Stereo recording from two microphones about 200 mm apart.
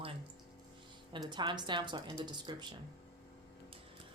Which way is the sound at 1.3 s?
20° right (ahead or behind).